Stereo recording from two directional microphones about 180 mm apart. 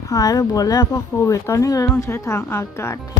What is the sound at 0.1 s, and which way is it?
Speech, 20° left (ahead or behind).